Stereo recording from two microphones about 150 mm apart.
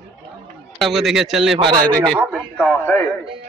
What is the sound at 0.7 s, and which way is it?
A man's voice, centre (ahead or behind).